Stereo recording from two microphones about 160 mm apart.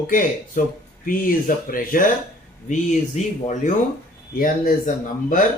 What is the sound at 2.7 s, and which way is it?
Speech, 50° left (ahead or behind).